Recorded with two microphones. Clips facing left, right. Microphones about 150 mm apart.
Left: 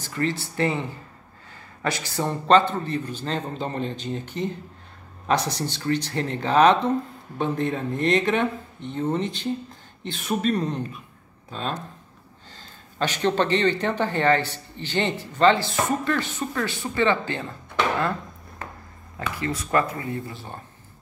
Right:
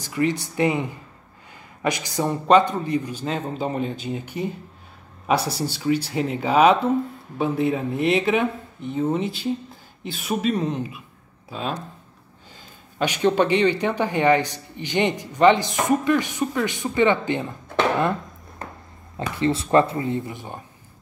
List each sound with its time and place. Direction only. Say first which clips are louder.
0.0 s a woman's voice: right 4 dB; 15° right (ahead or behind)
19.1 s speech: right 6 dB; 25° right (ahead or behind)